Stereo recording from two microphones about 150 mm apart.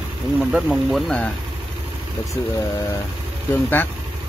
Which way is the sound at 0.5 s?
5° right (ahead or behind).